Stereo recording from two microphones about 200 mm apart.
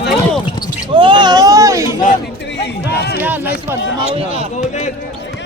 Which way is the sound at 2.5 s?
60° left (ahead or behind).